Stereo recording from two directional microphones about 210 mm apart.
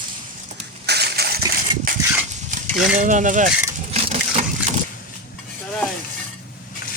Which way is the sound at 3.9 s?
30° right (ahead or behind).